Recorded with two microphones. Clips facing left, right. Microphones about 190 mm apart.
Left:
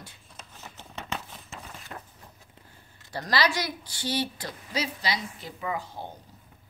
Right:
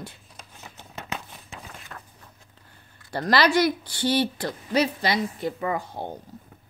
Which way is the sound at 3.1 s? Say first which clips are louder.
Right 6 dB; 60° right (ahead or behind).